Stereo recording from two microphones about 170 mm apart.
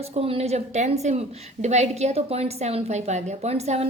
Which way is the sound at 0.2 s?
35° right (ahead or behind).